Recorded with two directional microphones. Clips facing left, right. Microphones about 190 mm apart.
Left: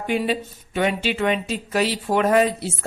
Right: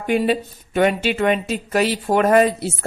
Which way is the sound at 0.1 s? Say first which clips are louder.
Right 5 dB; 50° right (ahead or behind).